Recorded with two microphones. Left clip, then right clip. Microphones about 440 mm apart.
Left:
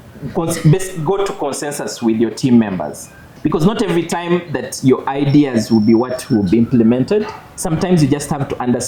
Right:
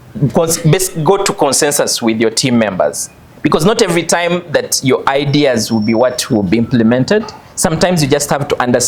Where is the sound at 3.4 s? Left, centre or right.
Right.